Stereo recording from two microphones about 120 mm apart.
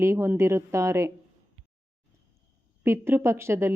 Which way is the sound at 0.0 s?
20° right (ahead or behind).